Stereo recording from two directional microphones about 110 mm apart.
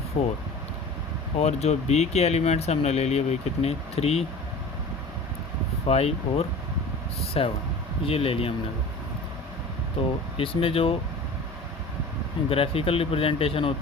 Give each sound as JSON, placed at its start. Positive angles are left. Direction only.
{"t": 0.1, "sound": "speech", "side_deg": 60}
{"t": 1.4, "sound": "speech", "side_deg": 85}
{"t": 5.9, "sound": "speech", "side_deg": 70}
{"t": 10.0, "sound": "speech", "side_deg": 60}
{"t": 12.5, "sound": "speech", "side_deg": 60}